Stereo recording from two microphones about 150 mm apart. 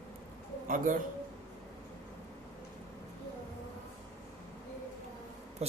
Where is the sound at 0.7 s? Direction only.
60° right (ahead or behind).